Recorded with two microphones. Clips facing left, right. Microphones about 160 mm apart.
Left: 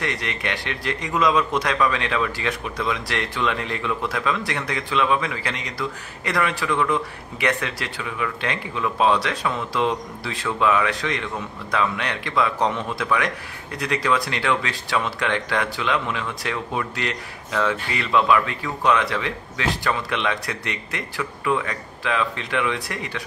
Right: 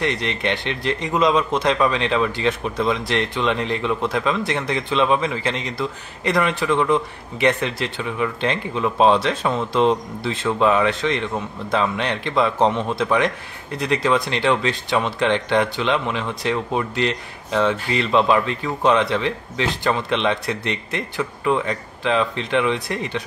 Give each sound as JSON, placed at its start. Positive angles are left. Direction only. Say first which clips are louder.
{"t": 0.0, "sound": "speech", "louder": "right 5 dB", "side_deg": -25}